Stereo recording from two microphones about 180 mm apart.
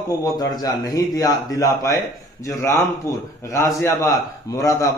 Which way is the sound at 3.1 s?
15° left (ahead or behind).